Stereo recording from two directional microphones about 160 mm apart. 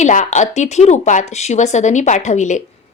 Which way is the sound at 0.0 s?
50° left (ahead or behind).